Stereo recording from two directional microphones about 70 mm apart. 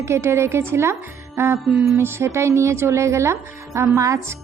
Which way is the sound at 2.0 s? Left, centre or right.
Right.